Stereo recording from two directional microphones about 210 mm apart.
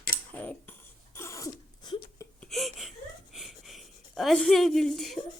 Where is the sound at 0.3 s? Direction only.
5° left (ahead or behind).